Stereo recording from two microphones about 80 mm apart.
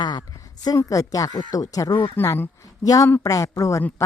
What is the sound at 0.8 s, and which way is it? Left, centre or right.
Speech, left.